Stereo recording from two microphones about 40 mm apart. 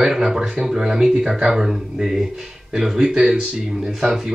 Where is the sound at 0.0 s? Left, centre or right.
Centre.